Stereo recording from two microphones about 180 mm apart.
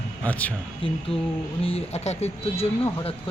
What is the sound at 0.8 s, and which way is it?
Speech, 30° left (ahead or behind).